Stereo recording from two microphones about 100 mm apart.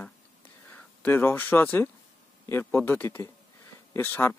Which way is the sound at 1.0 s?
20° left (ahead or behind).